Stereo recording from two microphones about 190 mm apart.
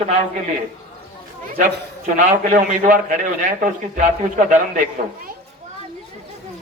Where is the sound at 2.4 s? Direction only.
45° right (ahead or behind).